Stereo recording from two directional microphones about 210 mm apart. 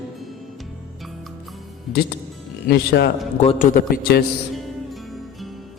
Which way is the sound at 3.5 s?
40° left (ahead or behind).